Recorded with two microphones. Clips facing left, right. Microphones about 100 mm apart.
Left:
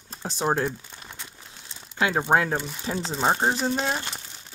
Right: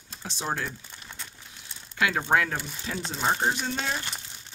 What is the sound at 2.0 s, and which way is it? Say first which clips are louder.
Speech: left 3 dB; 25° left (ahead or behind).